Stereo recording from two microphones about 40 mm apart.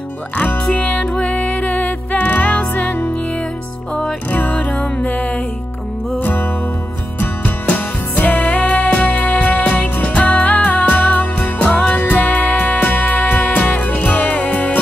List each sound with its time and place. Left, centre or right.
0.4 s music: left
1.1 s music: left
2.1 s music: left
4.3 s music: left
6.1 s music: left
7.7 s music: left
11.5 s music: left